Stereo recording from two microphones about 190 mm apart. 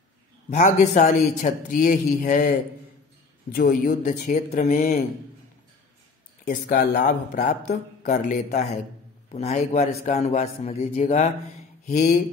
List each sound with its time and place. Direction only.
0.5 s speech: 40° left (ahead or behind)
3.5 s speech: 50° left (ahead or behind)
6.4 s speech: 50° left (ahead or behind)
11.9 s speech: 45° left (ahead or behind)